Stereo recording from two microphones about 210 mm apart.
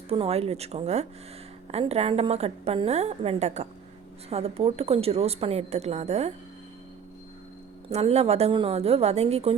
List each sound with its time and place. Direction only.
0.1 s a woman's voice: 30° right (ahead or behind)
7.9 s a woman's voice: 30° right (ahead or behind)